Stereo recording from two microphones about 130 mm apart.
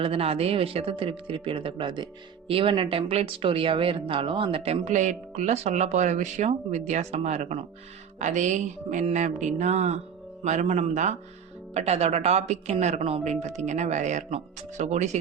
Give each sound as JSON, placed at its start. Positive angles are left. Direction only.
{"t": 0.0, "sound": "speech", "side_deg": -45}